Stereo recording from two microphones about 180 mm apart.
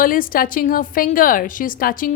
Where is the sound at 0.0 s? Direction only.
50° left (ahead or behind).